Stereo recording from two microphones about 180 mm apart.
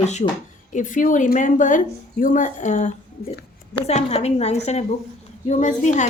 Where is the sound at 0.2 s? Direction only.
45° left (ahead or behind).